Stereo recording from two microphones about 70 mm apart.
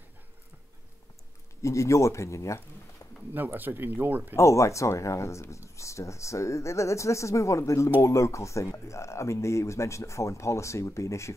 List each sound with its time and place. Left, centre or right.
1.6 s speech: left
3.3 s speech: right
4.4 s speech: left